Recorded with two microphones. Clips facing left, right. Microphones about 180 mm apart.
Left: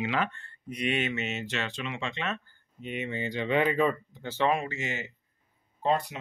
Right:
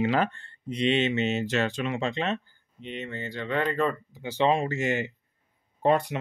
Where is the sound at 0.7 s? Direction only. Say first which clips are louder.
Right 5 dB; 25° right (ahead or behind).